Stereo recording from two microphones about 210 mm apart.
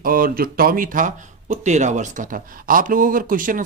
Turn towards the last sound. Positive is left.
turn(degrees=-40)  # may be behind; listen again after turning